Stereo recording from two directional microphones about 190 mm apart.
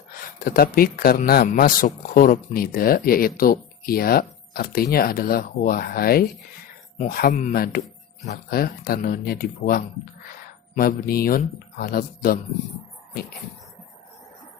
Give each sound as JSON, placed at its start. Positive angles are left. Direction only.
{"t": 0.3, "sound": "speech", "side_deg": 50}